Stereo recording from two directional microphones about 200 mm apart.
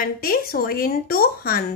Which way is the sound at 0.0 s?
45° left (ahead or behind).